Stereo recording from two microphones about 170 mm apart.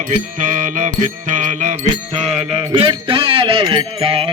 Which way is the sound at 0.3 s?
50° right (ahead or behind).